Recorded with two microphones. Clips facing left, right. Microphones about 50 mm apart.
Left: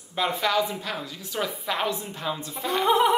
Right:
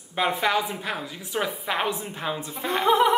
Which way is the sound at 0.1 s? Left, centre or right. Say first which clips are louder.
Right 1 dB; right.